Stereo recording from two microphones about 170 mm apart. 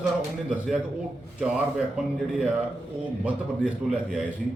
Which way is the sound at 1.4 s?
5° right (ahead or behind).